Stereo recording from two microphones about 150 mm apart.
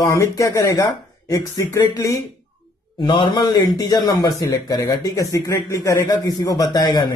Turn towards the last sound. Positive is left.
turn(degrees=30)  # may be behind; listen again after turning